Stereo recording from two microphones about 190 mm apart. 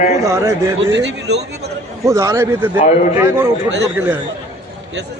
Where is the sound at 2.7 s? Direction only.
40° left (ahead or behind).